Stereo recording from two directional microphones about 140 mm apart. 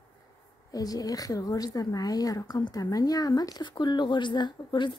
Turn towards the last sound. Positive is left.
turn(degrees=35)  # may be behind; listen again after turning